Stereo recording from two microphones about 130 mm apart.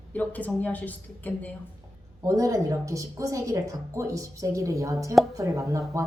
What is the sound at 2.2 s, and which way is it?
A woman's voice, 25° right (ahead or behind).